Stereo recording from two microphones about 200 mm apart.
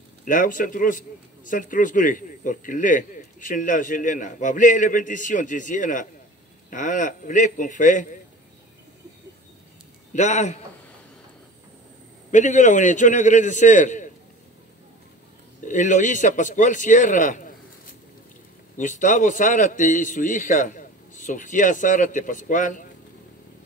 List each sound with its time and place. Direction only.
0.2 s a man's voice: 40° left (ahead or behind)
10.1 s a man's voice: 35° left (ahead or behind)
12.3 s a man's voice: 35° left (ahead or behind)
15.6 s a man's voice: 40° left (ahead or behind)